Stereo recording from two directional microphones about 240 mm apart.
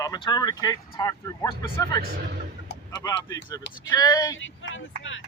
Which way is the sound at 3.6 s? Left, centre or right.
Left.